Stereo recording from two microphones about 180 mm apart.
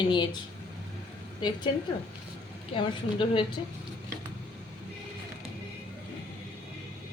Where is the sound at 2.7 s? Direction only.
30° left (ahead or behind).